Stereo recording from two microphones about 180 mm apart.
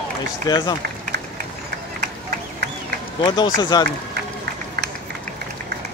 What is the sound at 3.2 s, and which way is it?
Speech, 25° left (ahead or behind).